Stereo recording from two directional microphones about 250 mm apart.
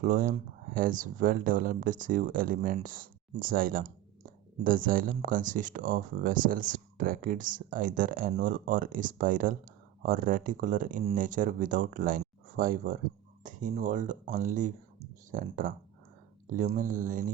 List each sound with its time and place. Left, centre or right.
0.0 s speech: right